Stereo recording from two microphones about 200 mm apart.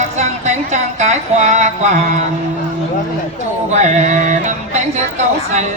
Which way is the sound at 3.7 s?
35° right (ahead or behind).